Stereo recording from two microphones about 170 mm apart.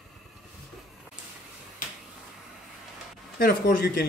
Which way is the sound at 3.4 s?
65° left (ahead or behind).